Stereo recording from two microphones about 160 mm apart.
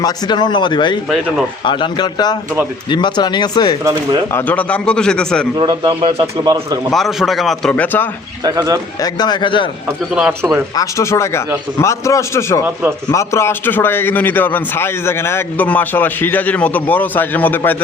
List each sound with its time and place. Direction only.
0.0 s speech: 25° left (ahead or behind)
4.3 s a man's voice: 15° left (ahead or behind)
5.5 s a man's voice: 30° right (ahead or behind)
6.4 s speech: 25° right (ahead or behind)
6.9 s a man's voice: centre (ahead or behind)
8.4 s speech: 25° right (ahead or behind)
9.0 s speech: 25° left (ahead or behind)
10.2 s speech: 5° right (ahead or behind)
10.8 s a man's voice: 20° left (ahead or behind)